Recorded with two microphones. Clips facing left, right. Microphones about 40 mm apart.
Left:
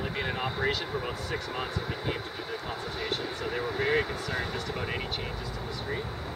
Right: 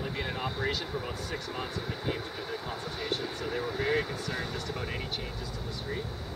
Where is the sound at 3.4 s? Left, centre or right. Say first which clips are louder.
Left 3 dB; centre.